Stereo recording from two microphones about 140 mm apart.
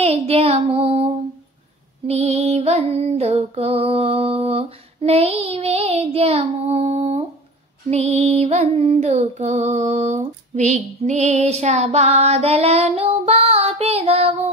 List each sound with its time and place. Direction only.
0.0 s child singing: 45° right (ahead or behind)
2.0 s music: 50° right (ahead or behind)